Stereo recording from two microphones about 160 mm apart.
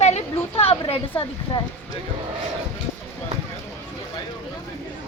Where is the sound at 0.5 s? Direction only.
40° left (ahead or behind).